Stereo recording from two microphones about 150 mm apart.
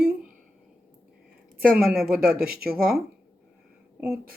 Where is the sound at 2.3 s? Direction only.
90° right.